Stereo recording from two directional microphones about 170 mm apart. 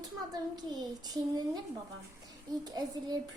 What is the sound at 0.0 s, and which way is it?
A child's voice, 25° right (ahead or behind).